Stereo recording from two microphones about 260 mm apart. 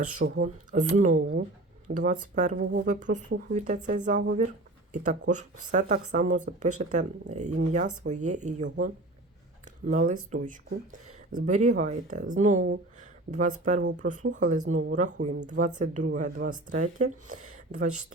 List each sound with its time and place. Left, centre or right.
0.2 s speech: right
9.8 s speech: right
11.3 s speech: right